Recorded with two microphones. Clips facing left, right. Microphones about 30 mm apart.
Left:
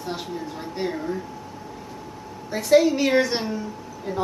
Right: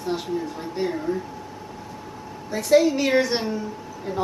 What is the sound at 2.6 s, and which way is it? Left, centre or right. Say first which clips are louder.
Speech: left 1 dB; centre.